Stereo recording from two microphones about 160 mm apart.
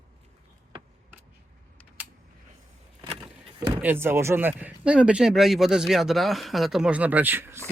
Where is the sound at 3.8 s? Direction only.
15° right (ahead or behind).